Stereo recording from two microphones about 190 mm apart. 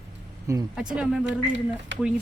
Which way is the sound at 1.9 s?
70° right (ahead or behind).